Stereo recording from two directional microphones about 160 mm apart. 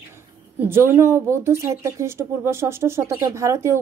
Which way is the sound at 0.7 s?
15° right (ahead or behind).